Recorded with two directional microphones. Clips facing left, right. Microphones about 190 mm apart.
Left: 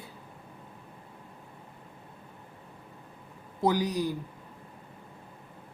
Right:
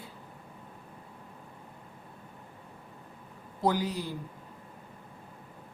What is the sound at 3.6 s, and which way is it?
Speech, 15° left (ahead or behind).